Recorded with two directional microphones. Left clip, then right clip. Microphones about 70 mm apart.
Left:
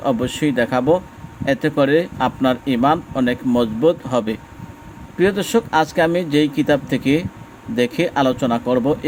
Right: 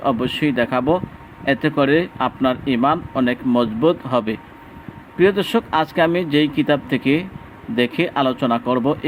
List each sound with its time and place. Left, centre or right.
0.0 s a man's voice: left